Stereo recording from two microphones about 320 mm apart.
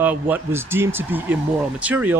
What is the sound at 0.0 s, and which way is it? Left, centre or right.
Speech, centre.